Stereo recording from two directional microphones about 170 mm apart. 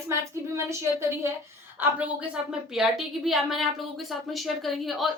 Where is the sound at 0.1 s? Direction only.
15° right (ahead or behind).